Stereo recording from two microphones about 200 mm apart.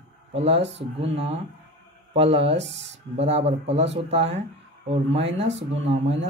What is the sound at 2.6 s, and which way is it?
Speech, 60° right (ahead or behind).